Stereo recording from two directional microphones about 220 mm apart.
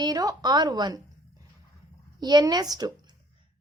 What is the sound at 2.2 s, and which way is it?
Speech, 20° right (ahead or behind).